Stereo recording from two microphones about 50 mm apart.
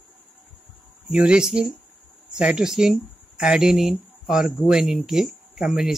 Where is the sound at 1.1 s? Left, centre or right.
Centre.